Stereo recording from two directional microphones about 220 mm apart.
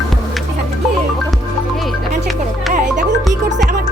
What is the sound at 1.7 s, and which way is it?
Music, centre (ahead or behind).